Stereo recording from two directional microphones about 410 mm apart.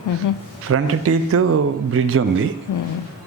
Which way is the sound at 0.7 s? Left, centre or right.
Right.